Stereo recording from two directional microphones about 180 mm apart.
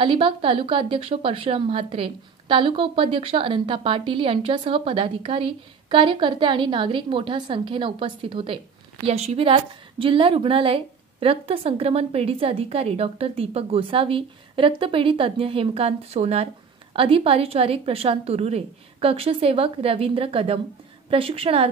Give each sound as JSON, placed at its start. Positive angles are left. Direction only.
{"t": 0.0, "sound": "a woman's voice", "side_deg": -30}